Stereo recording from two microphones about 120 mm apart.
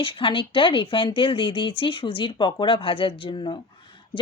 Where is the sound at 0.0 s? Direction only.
45° left (ahead or behind).